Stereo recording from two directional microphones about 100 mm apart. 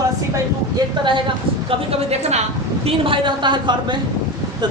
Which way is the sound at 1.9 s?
90° right.